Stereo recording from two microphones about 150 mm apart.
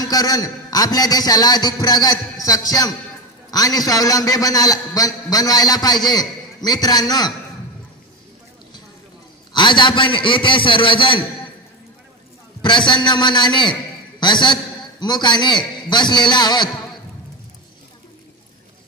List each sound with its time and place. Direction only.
0.0 s a man's voice: 25° left (ahead or behind)
9.5 s a man's voice: 30° left (ahead or behind)
12.6 s a man's voice: 30° left (ahead or behind)